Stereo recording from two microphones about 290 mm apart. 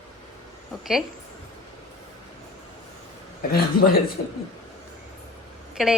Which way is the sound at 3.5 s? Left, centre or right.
Left.